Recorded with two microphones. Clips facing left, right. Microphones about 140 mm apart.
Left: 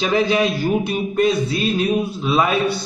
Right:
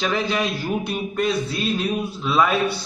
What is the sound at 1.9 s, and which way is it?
Speech, 15° left (ahead or behind).